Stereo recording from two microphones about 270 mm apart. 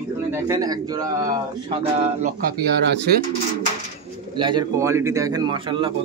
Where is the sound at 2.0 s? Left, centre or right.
Right.